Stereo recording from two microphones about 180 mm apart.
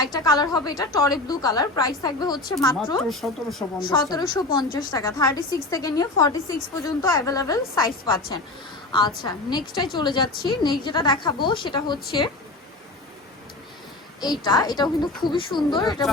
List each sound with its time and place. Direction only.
0.0 s a woman's voice: 20° left (ahead or behind)
3.0 s speech: centre (ahead or behind)
3.8 s a woman's voice: 25° left (ahead or behind)
14.2 s a woman's voice: 20° left (ahead or behind)